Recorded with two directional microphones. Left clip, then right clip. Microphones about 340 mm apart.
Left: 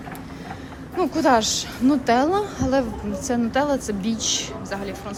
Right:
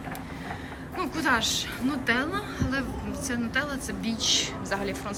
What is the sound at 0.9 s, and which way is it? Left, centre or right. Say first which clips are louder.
A woman's voice: left 8 dB; centre.